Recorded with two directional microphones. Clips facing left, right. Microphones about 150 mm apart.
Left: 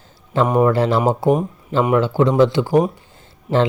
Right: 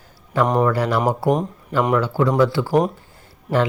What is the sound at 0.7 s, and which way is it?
Speech, 25° left (ahead or behind).